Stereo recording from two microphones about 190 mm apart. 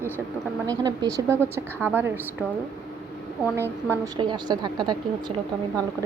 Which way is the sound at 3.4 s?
15° right (ahead or behind).